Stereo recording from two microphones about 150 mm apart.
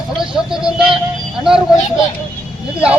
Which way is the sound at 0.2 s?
5° right (ahead or behind).